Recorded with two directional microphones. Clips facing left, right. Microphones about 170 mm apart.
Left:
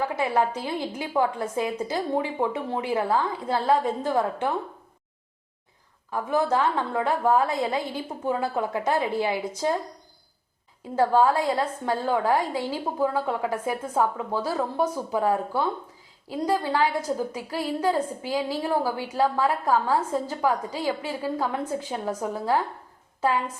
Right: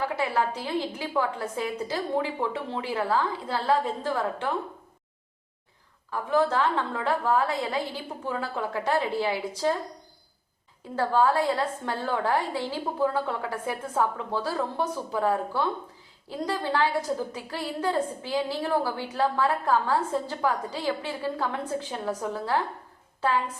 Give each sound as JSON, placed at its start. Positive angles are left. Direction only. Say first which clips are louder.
{"t": 0.2, "sound": "a woman's voice", "louder": "left 3 dB", "side_deg": 20}
{"t": 6.1, "sound": "a woman's voice", "louder": "left 1 dB", "side_deg": 15}
{"t": 10.9, "sound": "a woman's voice", "louder": "left 3 dB", "side_deg": 15}